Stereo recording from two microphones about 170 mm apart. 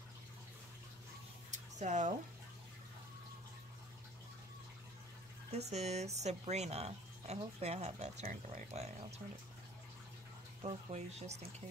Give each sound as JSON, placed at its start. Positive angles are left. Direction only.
{"t": 1.5, "sound": "a sound", "side_deg": -45}
{"t": 5.7, "sound": "speech", "side_deg": -40}
{"t": 10.6, "sound": "speech", "side_deg": -40}